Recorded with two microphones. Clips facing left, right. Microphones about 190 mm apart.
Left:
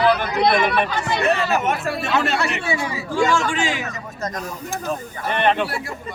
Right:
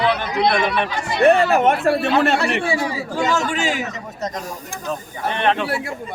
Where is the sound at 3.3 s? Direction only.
40° right (ahead or behind).